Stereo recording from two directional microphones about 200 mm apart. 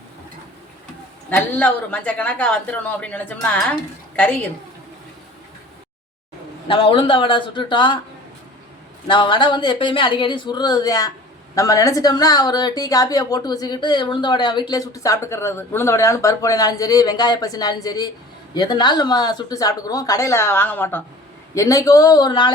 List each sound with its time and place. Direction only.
1.4 s a man's voice: 10° left (ahead or behind)
6.7 s a woman's voice: 25° left (ahead or behind)
9.0 s a woman's voice: 25° left (ahead or behind)